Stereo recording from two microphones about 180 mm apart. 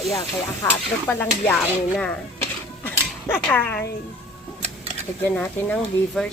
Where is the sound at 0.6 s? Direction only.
10° left (ahead or behind).